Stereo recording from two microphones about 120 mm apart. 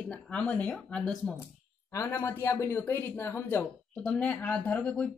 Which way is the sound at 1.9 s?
20° left (ahead or behind).